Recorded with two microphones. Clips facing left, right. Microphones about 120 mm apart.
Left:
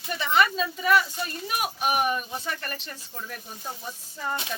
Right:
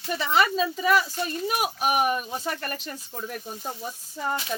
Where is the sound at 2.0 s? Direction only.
40° right (ahead or behind).